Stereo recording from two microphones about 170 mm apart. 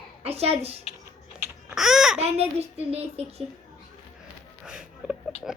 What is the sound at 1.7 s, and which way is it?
Babbling, 5° right (ahead or behind).